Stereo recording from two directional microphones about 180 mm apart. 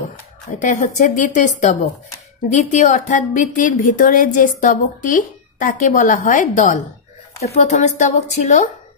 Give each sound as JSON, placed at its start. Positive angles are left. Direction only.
{"t": 0.6, "sound": "a woman's voice", "side_deg": 45}